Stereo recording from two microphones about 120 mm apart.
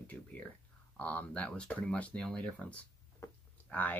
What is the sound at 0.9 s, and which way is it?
Speech, 10° left (ahead or behind).